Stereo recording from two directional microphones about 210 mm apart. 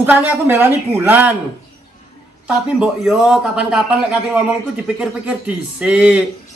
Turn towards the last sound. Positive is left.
turn(degrees=-5)  # may be behind; listen again after turning